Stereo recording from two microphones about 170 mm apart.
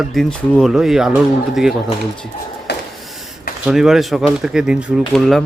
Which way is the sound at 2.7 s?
75° left (ahead or behind).